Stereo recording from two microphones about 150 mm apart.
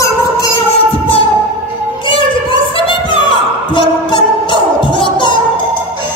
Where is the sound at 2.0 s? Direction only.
35° left (ahead or behind).